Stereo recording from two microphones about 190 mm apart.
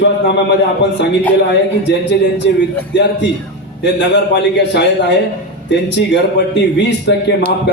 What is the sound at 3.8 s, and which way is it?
A man's voice, 65° left (ahead or behind).